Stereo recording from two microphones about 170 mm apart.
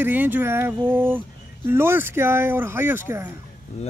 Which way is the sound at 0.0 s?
10° right (ahead or behind).